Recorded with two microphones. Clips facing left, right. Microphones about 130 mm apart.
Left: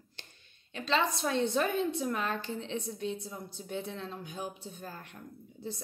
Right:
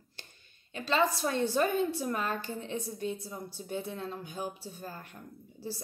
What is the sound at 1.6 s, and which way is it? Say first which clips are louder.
Speech: right 5 dB; 50° right (ahead or behind).